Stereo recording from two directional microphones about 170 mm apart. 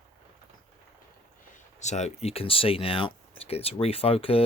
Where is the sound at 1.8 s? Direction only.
40° left (ahead or behind).